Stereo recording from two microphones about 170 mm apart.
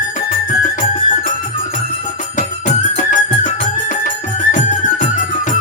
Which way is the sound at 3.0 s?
50° left (ahead or behind).